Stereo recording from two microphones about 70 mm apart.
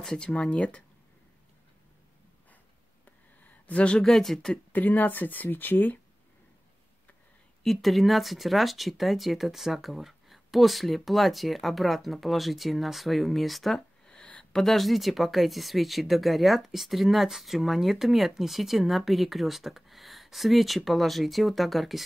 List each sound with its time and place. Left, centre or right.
0.0 s speech: centre
3.6 s speech: centre
4.1 s speech: centre
4.7 s speech: left
7.6 s speech: centre
14.6 s speech: centre